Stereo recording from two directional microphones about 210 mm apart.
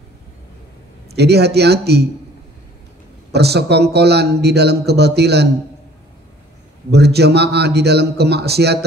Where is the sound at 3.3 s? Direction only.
50° right (ahead or behind).